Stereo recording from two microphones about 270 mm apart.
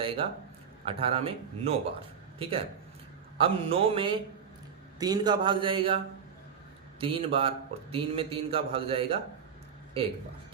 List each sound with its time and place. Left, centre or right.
0.0 s a man's voice: centre
7.0 s a man's voice: centre